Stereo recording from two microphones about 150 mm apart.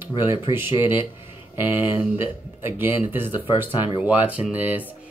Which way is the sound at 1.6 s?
15° right (ahead or behind).